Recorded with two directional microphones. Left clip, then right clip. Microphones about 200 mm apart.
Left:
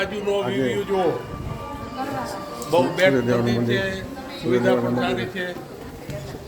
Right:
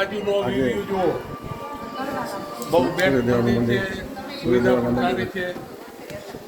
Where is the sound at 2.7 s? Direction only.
45° left (ahead or behind).